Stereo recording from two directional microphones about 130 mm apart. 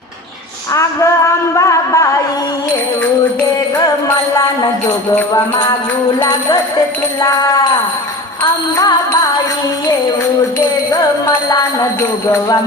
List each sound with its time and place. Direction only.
0.7 s a sound: 25° left (ahead or behind)
5.3 s music: 35° left (ahead or behind)
11.4 s music: 30° left (ahead or behind)